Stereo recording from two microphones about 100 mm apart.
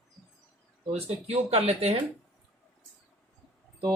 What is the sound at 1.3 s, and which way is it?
Speech, 90° right.